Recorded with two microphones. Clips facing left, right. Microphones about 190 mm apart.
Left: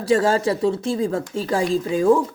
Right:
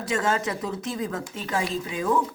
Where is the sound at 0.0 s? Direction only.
35° left (ahead or behind).